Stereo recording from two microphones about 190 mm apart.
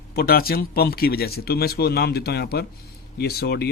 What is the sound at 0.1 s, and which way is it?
Speech, 55° left (ahead or behind).